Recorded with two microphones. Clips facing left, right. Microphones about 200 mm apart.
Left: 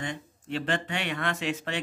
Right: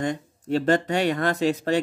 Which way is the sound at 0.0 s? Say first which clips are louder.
Right 8 dB; 40° right (ahead or behind).